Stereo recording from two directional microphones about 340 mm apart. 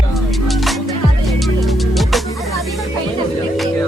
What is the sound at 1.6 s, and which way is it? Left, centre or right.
Music, centre.